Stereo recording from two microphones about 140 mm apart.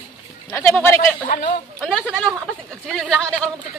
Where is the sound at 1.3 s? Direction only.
70° left (ahead or behind).